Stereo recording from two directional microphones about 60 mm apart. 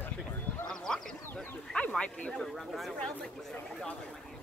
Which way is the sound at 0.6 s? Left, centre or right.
Centre.